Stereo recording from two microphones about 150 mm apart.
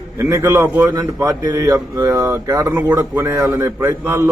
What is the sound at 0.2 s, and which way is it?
A man's voice, 20° right (ahead or behind).